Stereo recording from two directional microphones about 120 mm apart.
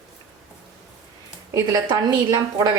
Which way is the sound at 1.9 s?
35° right (ahead or behind).